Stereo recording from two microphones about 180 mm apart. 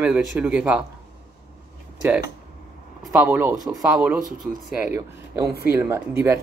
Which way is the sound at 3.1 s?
10° right (ahead or behind).